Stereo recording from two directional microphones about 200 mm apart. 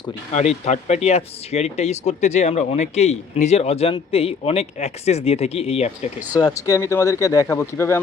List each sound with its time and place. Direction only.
0.3 s speech: 35° left (ahead or behind)
6.3 s speech: 20° left (ahead or behind)